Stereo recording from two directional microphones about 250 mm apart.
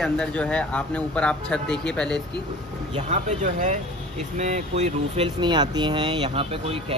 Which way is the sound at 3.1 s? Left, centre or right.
Right.